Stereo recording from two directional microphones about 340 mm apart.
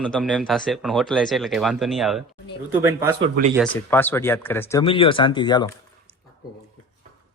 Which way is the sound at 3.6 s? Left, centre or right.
Centre.